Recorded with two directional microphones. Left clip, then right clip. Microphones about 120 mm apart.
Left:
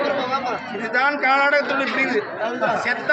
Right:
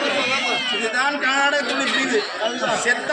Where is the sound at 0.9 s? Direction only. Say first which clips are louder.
Left 5 dB; 20° left (ahead or behind).